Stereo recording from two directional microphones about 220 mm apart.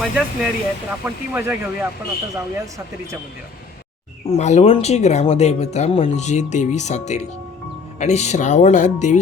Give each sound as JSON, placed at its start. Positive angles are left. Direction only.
{"t": 0.0, "sound": "speech", "side_deg": -5}
{"t": 4.3, "sound": "speech", "side_deg": 30}